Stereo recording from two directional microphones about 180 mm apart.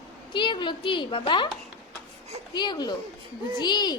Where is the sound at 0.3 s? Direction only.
25° left (ahead or behind).